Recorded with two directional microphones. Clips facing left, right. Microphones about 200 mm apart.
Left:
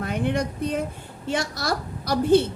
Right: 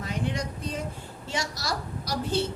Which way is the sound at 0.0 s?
55° left (ahead or behind).